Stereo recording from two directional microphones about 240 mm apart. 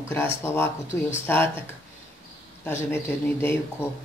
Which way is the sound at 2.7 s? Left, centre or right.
Centre.